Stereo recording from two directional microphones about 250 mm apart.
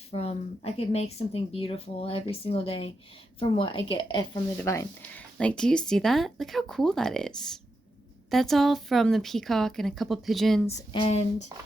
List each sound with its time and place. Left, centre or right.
0.1 s speech: left; by 10.8 s centre
10.8 s speech: left